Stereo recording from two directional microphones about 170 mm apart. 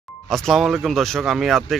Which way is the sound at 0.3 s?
Centre (ahead or behind).